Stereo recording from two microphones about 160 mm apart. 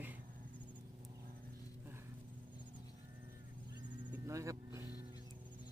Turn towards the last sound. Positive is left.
turn(degrees=-15)  # may be behind; listen again after turning